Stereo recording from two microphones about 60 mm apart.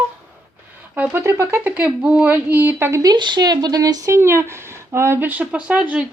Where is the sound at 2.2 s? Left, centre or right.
Right.